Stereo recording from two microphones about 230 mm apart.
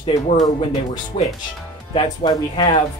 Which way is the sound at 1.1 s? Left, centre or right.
Left.